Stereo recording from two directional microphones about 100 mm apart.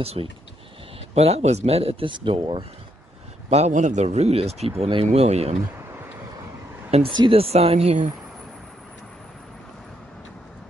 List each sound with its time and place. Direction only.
0.0 s speech: 90° right; by 2.6 s 60° right (ahead or behind)
3.4 s speech: 90° right
6.9 s speech: 75° right (ahead or behind)